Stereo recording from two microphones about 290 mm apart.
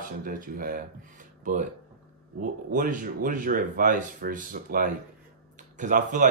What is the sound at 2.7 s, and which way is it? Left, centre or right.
Speech, right.